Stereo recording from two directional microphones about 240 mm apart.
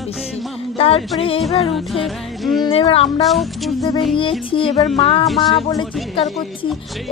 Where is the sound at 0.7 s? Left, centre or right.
Left.